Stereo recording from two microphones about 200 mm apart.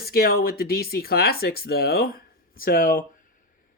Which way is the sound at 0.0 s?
50° left (ahead or behind).